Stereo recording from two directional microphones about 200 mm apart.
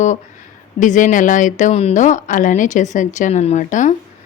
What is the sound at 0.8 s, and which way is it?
A woman's voice, 40° left (ahead or behind).